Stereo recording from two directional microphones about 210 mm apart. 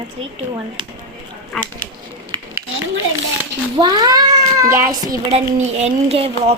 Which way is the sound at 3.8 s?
20° right (ahead or behind).